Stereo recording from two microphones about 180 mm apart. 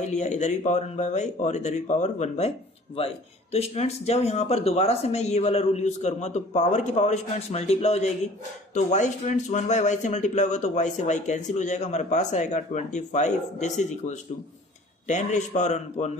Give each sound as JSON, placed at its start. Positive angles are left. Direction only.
{"t": 0.0, "sound": "speech", "side_deg": 40}
{"t": 3.5, "sound": "speech", "side_deg": 35}